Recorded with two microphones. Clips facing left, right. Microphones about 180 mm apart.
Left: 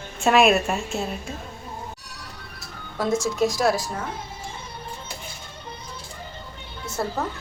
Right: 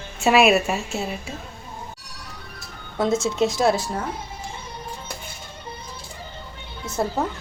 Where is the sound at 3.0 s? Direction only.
25° right (ahead or behind).